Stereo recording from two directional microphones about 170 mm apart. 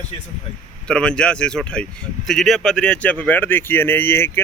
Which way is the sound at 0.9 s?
5° left (ahead or behind).